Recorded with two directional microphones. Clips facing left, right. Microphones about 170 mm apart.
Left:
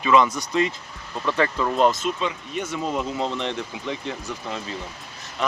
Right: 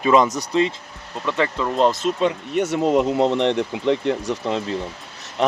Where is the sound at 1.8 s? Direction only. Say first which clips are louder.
Right 2 dB; 35° right (ahead or behind).